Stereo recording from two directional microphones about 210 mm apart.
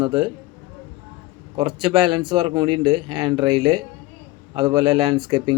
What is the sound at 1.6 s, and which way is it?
Speech, 20° right (ahead or behind).